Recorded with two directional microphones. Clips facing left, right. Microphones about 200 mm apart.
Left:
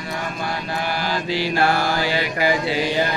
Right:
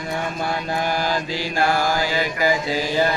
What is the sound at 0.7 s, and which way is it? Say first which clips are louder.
Mantra: right 2 dB; 45° right (ahead or behind).